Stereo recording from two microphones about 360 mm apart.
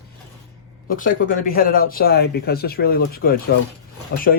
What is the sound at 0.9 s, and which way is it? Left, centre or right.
Speech, left.